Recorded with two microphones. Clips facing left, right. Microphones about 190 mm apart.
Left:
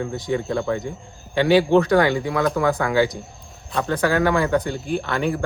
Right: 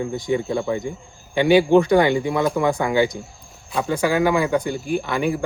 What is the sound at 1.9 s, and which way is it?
Speech, 20° right (ahead or behind).